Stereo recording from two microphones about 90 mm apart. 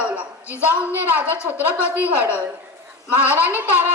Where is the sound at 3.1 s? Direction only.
20° right (ahead or behind).